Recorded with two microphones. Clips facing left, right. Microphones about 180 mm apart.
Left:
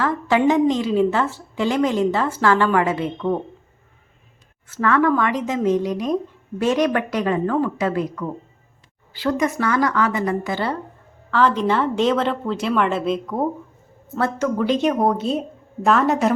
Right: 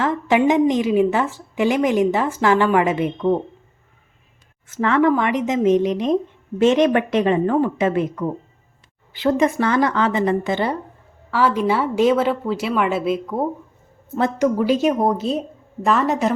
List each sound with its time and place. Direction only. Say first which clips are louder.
0.0 s a woman's voice: right 1 dB; 20° right (ahead or behind)
4.7 s speech: right 1 dB; 20° right (ahead or behind)
11.3 s a woman's voice: even; 10° right (ahead or behind)
14.2 s a woman's voice: right 3 dB; 15° right (ahead or behind)
14.8 s a woman's voice: right 1 dB; centre (ahead or behind)